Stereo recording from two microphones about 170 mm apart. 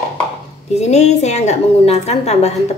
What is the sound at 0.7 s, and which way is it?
A woman's voice, 40° left (ahead or behind).